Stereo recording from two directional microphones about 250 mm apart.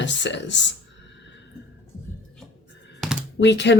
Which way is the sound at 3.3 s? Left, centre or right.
Left.